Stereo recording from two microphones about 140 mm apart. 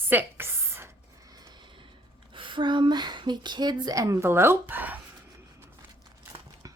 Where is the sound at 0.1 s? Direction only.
15° right (ahead or behind).